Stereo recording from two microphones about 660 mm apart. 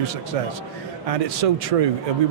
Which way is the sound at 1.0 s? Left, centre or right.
Right.